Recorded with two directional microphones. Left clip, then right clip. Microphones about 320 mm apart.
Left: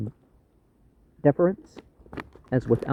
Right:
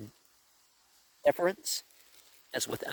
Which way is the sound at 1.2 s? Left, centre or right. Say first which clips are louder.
Left 6 dB; right.